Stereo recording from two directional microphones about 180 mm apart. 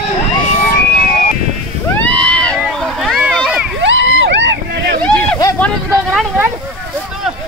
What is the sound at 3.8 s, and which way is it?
Vehicle, 90° right.